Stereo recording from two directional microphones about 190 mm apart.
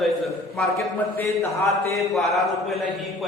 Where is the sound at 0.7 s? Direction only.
15° left (ahead or behind).